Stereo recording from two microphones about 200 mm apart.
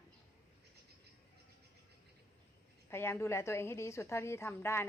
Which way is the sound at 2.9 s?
10° left (ahead or behind).